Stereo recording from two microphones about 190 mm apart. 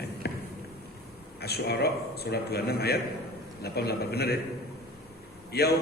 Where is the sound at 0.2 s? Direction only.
60° left (ahead or behind).